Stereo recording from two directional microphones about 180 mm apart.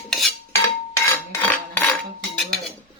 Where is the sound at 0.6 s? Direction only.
15° left (ahead or behind).